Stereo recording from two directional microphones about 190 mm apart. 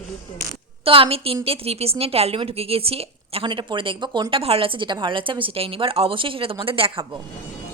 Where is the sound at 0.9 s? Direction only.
30° right (ahead or behind).